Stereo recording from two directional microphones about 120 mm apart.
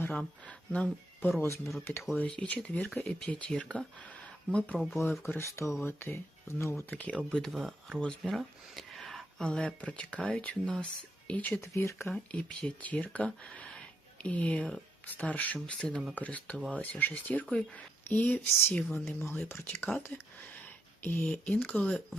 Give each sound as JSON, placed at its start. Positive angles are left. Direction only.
{"t": 0.1, "sound": "speech", "side_deg": 10}
{"t": 1.4, "sound": "speech", "side_deg": 25}
{"t": 5.3, "sound": "speech", "side_deg": 25}
{"t": 6.9, "sound": "speech", "side_deg": 10}
{"t": 11.7, "sound": "speech", "side_deg": 25}
{"t": 12.0, "sound": "speech", "side_deg": 10}
{"t": 16.0, "sound": "speech", "side_deg": -10}
{"t": 16.2, "sound": "speech", "side_deg": 10}